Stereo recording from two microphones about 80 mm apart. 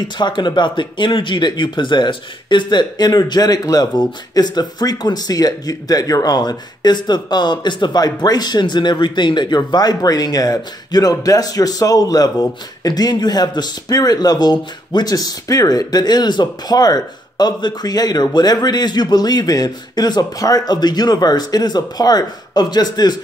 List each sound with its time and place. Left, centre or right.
0.2 s speech: left
9.6 s speech: left